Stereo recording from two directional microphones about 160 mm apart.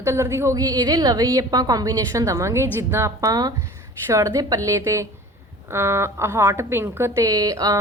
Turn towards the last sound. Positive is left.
turn(degrees=-20)  # may be behind; listen again after turning